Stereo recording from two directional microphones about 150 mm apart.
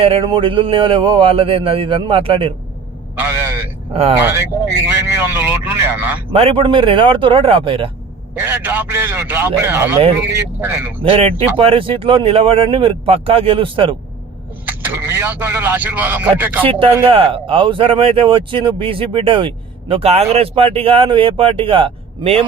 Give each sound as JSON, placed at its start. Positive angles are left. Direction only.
{"t": 0.0, "sound": "speech", "side_deg": -35}
{"t": 3.2, "sound": "a man's voice", "side_deg": -15}
{"t": 6.3, "sound": "speech", "side_deg": -40}
{"t": 8.4, "sound": "speech", "side_deg": -15}
{"t": 11.0, "sound": "speech", "side_deg": -40}
{"t": 14.7, "sound": "speech", "side_deg": -10}
{"t": 17.1, "sound": "speech", "side_deg": -40}